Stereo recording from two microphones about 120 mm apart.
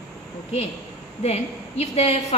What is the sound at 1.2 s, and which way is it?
A woman's voice, 60° left (ahead or behind).